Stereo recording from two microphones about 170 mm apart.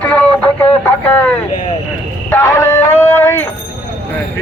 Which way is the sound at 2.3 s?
15° left (ahead or behind).